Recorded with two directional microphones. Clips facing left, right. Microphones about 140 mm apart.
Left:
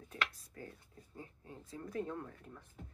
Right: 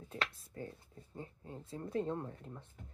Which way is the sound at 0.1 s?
30° right (ahead or behind).